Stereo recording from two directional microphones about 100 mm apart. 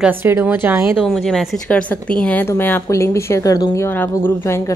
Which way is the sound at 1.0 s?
5° left (ahead or behind).